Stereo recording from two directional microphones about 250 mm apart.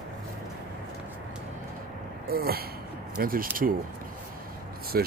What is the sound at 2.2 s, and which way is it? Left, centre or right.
Speech, right.